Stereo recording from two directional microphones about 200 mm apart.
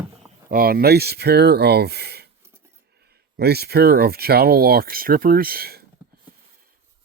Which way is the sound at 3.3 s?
50° right (ahead or behind).